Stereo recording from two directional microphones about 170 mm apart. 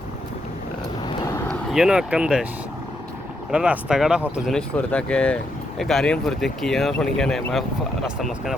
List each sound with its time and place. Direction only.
1.5 s speech: 5° right (ahead or behind)
3.5 s speech: 5° right (ahead or behind)